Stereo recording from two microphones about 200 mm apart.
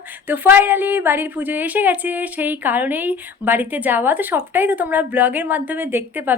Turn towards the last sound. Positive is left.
turn(degrees=-10)  # may be behind; listen again after turning